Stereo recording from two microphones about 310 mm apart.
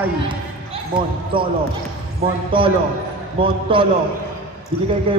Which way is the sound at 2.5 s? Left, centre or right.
Centre.